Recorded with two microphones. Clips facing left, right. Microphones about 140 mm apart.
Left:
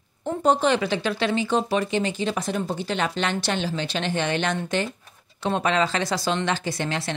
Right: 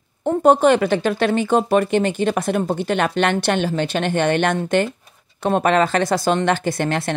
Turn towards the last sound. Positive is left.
turn(degrees=-55)  # may be behind; listen again after turning